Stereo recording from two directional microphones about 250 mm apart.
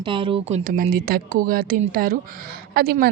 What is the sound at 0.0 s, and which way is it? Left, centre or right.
A woman's voice, centre.